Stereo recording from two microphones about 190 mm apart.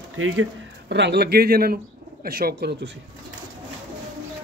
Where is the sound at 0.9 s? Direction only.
65° right (ahead or behind).